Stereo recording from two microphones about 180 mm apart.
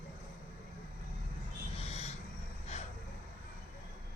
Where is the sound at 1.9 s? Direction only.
35° left (ahead or behind).